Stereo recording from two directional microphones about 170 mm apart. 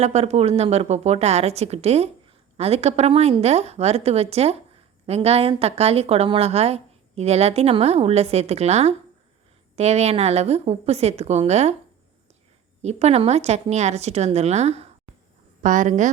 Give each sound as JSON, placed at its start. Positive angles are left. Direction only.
{"t": 0.0, "sound": "a woman's voice", "side_deg": -40}
{"t": 12.8, "sound": "a woman's voice", "side_deg": -40}